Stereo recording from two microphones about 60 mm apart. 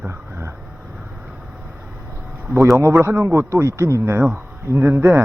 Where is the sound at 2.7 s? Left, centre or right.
Right.